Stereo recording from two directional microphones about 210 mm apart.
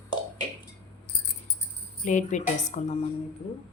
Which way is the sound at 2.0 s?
35° left (ahead or behind).